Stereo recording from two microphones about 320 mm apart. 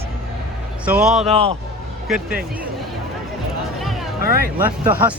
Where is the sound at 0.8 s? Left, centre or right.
Centre.